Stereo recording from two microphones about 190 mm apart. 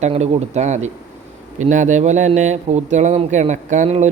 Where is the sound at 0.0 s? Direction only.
35° right (ahead or behind).